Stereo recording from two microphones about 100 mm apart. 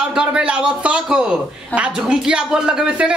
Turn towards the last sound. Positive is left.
turn(degrees=-10)  # may be behind; listen again after turning